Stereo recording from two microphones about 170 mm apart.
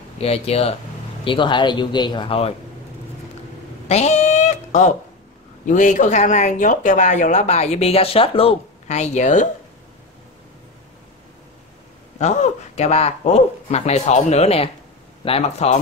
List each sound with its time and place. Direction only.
0.2 s speech: 35° left (ahead or behind)
3.8 s cat: 40° left (ahead or behind)
5.7 s speech: 50° left (ahead or behind)
12.2 s speech: 45° left (ahead or behind)